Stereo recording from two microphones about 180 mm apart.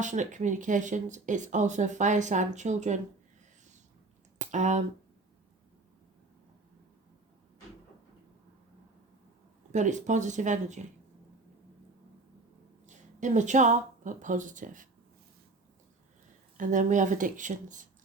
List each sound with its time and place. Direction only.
0.0 s speech: 45° right (ahead or behind)
4.4 s a sound: 45° right (ahead or behind)
9.7 s speech: 40° right (ahead or behind)
12.8 s speech: 45° right (ahead or behind)
16.6 s speech: 45° right (ahead or behind)